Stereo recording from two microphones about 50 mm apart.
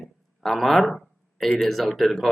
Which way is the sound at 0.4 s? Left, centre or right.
Centre.